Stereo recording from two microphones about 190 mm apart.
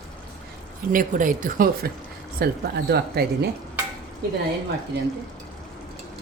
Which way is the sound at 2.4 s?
55° right (ahead or behind).